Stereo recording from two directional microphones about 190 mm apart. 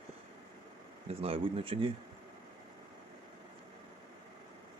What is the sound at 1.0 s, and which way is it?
Speech, 30° right (ahead or behind).